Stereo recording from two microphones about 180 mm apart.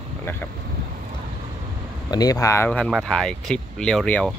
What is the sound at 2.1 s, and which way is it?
Speech, 20° left (ahead or behind).